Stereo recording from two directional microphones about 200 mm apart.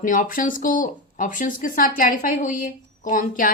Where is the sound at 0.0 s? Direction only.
40° left (ahead or behind).